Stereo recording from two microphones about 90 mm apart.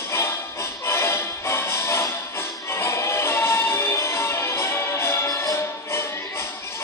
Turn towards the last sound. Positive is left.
turn(degrees=30)  # may be behind; listen again after turning